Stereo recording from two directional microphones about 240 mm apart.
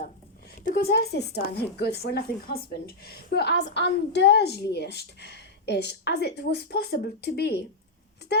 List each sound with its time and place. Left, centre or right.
0.6 s a woman's voice: left